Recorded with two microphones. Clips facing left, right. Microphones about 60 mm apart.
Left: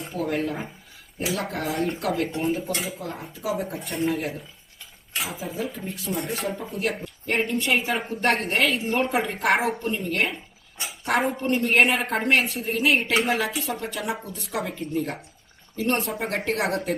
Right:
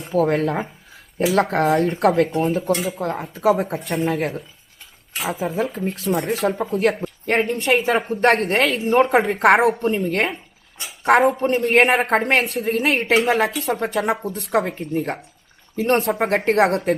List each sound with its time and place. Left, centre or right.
0.1 s speech: right
14.3 s speech: right
14.5 s speech: right